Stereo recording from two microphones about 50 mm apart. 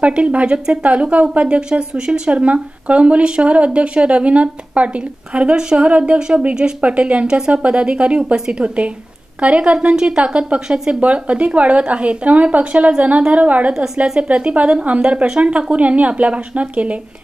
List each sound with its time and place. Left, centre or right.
0.0 s a woman's voice: right
13.7 s a woman's voice: centre
14.2 s a woman's voice: right